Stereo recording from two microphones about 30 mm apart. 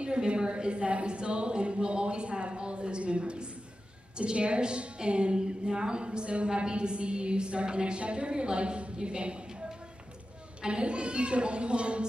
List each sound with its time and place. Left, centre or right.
0.4 s a woman's voice: right
10.7 s a woman's voice: right